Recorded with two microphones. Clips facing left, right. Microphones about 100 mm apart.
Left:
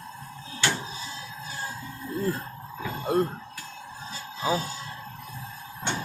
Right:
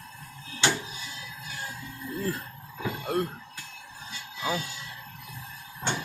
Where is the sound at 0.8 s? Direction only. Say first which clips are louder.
Left 3 dB; 30° left (ahead or behind).